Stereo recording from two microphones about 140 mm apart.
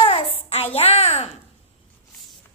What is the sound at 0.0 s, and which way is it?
Child singing, 45° left (ahead or behind).